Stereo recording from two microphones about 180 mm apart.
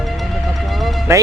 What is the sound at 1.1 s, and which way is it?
Speech, 15° right (ahead or behind).